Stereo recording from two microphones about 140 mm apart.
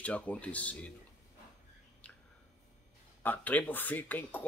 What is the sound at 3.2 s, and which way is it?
Speech, 10° left (ahead or behind).